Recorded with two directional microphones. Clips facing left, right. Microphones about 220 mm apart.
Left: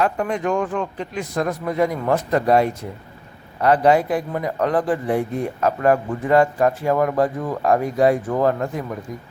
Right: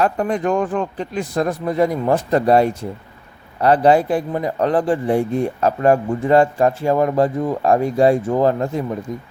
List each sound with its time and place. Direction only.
0.0 s a man's voice: 35° right (ahead or behind)